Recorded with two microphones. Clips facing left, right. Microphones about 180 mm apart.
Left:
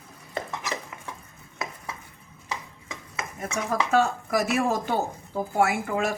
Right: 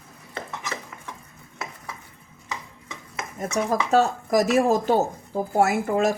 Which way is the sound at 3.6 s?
35° right (ahead or behind).